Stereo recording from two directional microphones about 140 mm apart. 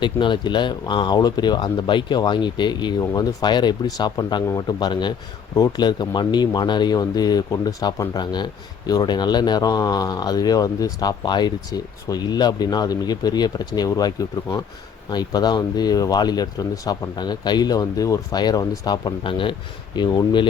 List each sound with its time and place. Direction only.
0.0 s speech: 35° left (ahead or behind)
15.1 s speech: 30° left (ahead or behind)